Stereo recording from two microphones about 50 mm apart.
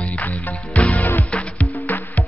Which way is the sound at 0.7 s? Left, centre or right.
Left.